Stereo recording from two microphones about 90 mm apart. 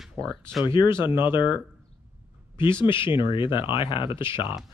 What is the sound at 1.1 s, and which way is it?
Speech, 25° right (ahead or behind).